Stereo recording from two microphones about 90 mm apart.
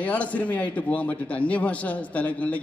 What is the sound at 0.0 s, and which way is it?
A man's voice, 15° left (ahead or behind).